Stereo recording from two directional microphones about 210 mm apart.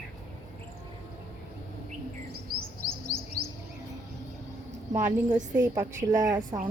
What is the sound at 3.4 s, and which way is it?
Chirp, 45° right (ahead or behind).